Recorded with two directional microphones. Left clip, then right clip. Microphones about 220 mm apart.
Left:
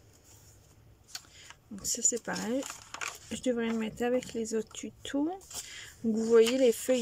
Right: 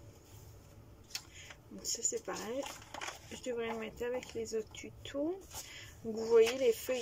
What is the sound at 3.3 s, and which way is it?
Speech, 45° left (ahead or behind).